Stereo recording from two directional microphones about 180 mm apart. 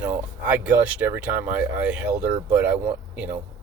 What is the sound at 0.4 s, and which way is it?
Speech, 10° right (ahead or behind).